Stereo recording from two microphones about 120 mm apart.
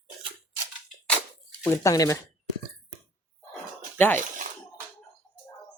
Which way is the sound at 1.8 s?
30° left (ahead or behind).